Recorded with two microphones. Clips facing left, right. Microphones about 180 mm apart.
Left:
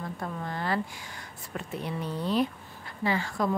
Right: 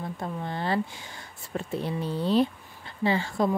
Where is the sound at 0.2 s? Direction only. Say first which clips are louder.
Right 2 dB; 25° right (ahead or behind).